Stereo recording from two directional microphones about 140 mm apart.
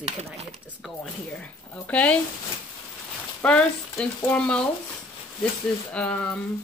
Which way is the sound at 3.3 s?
10° left (ahead or behind).